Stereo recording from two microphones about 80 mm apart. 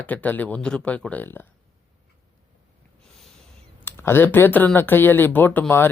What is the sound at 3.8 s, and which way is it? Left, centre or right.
Speech, left.